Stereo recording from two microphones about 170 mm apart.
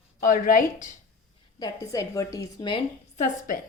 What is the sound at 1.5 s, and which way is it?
A woman's voice, 20° left (ahead or behind).